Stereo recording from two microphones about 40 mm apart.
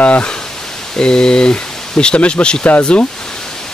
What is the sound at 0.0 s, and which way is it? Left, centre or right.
Speech, left.